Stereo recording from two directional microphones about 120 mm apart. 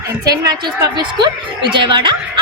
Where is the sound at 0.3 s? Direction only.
30° right (ahead or behind).